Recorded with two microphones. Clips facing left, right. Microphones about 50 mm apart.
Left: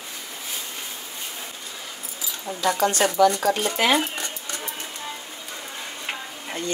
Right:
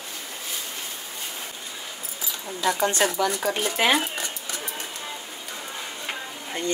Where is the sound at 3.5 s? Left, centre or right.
Centre.